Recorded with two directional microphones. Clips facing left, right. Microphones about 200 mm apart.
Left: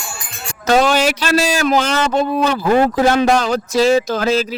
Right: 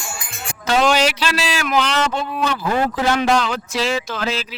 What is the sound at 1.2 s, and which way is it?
A man's voice, 45° left (ahead or behind).